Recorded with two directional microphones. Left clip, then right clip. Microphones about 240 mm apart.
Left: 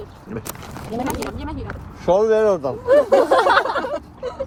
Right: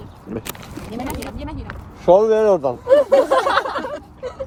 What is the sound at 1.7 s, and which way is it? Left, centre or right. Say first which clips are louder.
Speech: right 5 dB; right.